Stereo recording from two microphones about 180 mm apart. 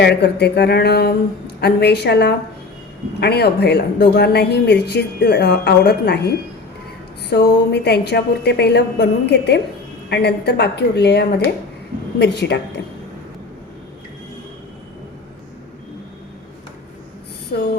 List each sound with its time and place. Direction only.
0.0 s a woman's voice: 70° left (ahead or behind)